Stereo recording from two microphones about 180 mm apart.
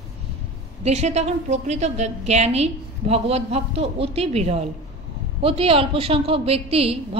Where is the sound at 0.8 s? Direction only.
35° right (ahead or behind).